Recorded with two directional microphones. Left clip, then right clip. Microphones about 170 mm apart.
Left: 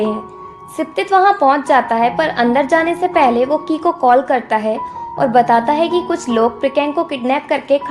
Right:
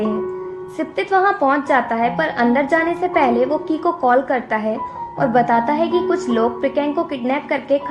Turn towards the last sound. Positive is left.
turn(degrees=35)  # may be behind; listen again after turning